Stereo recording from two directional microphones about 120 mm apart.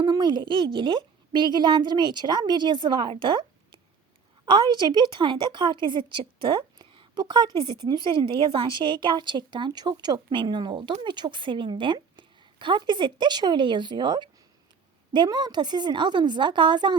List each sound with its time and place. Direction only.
0.0 s a woman's voice: 40° right (ahead or behind)